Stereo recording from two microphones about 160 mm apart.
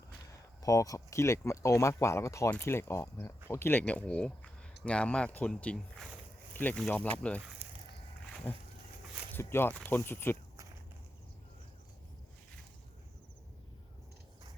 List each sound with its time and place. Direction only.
0.6 s speech: 20° left (ahead or behind)
8.4 s speech: 10° left (ahead or behind)